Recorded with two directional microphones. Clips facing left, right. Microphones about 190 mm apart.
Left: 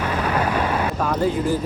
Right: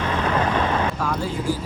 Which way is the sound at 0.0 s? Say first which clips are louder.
Even; 10° left (ahead or behind).